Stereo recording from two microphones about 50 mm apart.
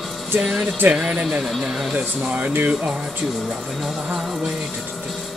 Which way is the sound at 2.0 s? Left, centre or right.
Right.